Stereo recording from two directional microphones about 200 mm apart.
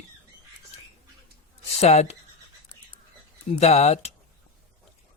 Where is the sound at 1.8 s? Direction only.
35° left (ahead or behind).